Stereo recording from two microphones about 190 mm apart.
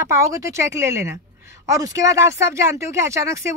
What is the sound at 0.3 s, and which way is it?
A woman's voice, 15° right (ahead or behind).